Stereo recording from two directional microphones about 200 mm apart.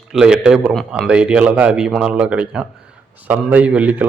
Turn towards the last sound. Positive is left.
turn(degrees=-5)  # may be behind; listen again after turning